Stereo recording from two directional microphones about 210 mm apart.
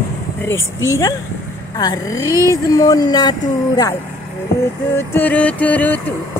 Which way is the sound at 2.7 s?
20° left (ahead or behind).